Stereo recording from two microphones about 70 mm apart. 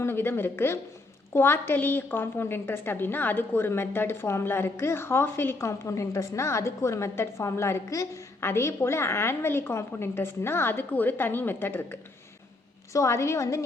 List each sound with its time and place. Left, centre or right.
0.0 s a woman's voice: left
5.5 s a woman's voice: left
8.4 s a woman's voice: left
12.9 s a woman's voice: left